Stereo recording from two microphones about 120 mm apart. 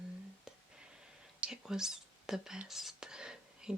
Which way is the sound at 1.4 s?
5° right (ahead or behind).